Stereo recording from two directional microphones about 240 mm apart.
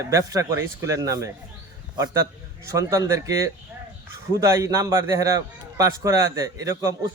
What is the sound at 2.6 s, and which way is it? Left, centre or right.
A man's voice, centre.